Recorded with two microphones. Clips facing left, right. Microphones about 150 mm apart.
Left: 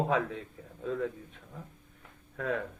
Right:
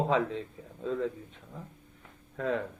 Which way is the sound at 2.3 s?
25° right (ahead or behind).